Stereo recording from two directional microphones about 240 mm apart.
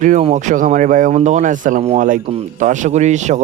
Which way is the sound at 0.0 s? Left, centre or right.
Right.